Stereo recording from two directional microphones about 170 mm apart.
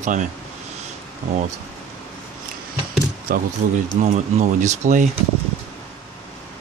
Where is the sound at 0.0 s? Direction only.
45° right (ahead or behind).